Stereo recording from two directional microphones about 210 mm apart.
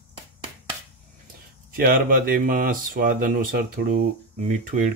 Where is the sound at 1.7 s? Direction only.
45° right (ahead or behind).